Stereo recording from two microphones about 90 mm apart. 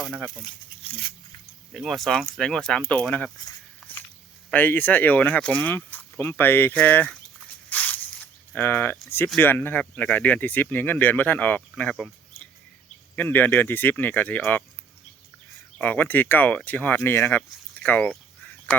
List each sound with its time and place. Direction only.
0.8 s a sound: 85° left
1.7 s speech: centre (ahead or behind)
3.8 s walk: 5° right (ahead or behind)
4.5 s speech: 20° left (ahead or behind)
7.7 s zipper: 20° left (ahead or behind)
9.4 s speech: 25° left (ahead or behind)
15.8 s speech: 20° left (ahead or behind)